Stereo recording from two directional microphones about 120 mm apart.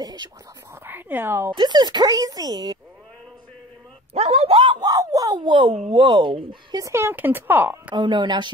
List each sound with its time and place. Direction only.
0.0 s whispering: 35° right (ahead or behind)
0.8 s speech: 15° right (ahead or behind)
1.5 s speech: 40° right (ahead or behind)
4.1 s speech: 60° right (ahead or behind)
4.7 s a sound: 30° right (ahead or behind)
5.9 s speech: 45° right (ahead or behind)
6.8 s speech: 20° right (ahead or behind)
7.9 s speech: 40° right (ahead or behind)